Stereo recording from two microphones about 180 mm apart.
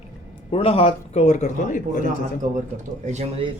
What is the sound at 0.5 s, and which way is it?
Speech, 35° left (ahead or behind).